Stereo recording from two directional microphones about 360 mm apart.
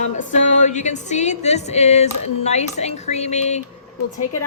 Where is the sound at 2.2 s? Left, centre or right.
Centre.